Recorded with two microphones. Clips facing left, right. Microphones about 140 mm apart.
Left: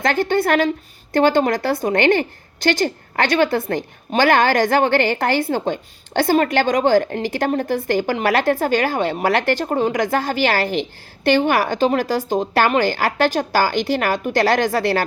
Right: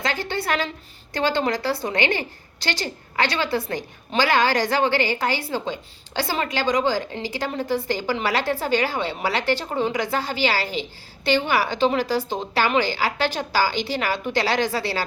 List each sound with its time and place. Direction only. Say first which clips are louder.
0.0 s a woman's voice: left 8 dB; 50° left (ahead or behind)